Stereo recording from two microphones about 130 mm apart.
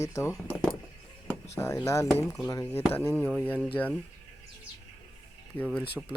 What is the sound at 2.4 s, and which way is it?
Speech, 20° left (ahead or behind).